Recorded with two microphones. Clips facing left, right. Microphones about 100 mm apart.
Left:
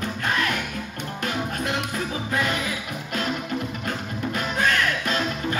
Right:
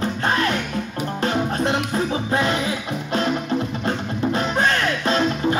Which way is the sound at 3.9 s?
30° right (ahead or behind).